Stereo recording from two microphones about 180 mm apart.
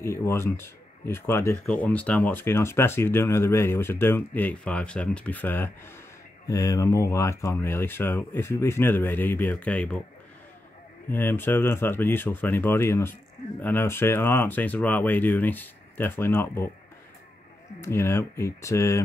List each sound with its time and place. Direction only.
0.0 s speech: 15° left (ahead or behind)
11.1 s speech: 10° left (ahead or behind)
17.7 s speech: 15° left (ahead or behind)